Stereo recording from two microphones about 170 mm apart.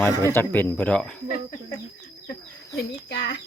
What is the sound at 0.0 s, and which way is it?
Speech, 15° left (ahead or behind).